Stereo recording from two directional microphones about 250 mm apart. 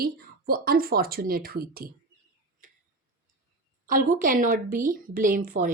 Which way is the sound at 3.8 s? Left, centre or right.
Right.